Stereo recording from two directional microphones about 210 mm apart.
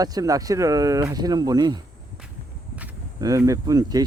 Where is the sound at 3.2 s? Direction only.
15° right (ahead or behind).